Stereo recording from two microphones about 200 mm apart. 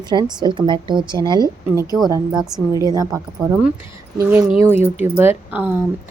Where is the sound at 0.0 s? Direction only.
20° right (ahead or behind).